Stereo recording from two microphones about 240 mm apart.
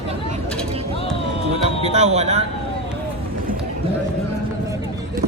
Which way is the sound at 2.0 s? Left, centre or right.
Right.